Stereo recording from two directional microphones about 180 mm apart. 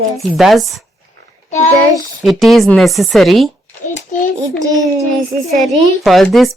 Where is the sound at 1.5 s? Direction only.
40° left (ahead or behind).